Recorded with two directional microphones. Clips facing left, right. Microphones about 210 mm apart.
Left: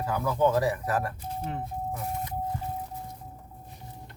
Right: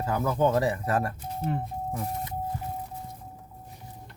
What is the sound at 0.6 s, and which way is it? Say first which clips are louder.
Speech: right 1 dB; 25° right (ahead or behind).